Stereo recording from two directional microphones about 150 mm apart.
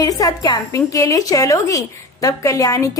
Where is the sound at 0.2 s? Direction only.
25° left (ahead or behind).